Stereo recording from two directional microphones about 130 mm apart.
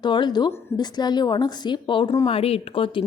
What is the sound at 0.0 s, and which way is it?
A woman's voice, 35° left (ahead or behind).